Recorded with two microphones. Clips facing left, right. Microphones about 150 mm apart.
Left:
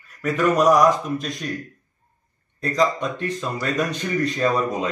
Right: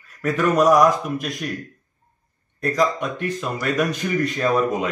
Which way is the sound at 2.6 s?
5° right (ahead or behind).